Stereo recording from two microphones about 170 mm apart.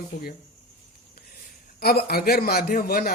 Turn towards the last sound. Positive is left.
turn(degrees=60)  # may be behind; listen again after turning